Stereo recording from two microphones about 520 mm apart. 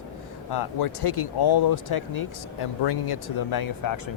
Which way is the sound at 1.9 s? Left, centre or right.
Left.